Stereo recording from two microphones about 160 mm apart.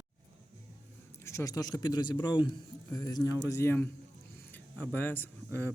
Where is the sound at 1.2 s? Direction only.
20° left (ahead or behind).